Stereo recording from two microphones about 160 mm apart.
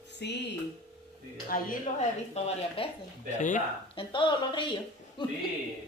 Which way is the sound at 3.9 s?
30° left (ahead or behind).